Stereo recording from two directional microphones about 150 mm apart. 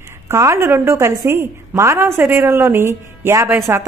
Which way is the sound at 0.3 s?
20° right (ahead or behind).